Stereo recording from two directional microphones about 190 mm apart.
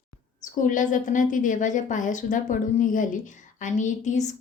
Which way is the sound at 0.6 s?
45° left (ahead or behind).